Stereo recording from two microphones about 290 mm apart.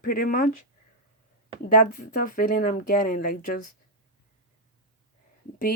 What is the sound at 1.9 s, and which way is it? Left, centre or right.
Speech, left.